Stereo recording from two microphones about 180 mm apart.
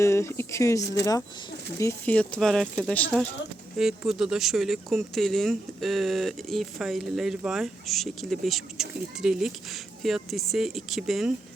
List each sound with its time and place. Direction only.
0.0 s speech: 15° left (ahead or behind); by 11.3 s centre (ahead or behind)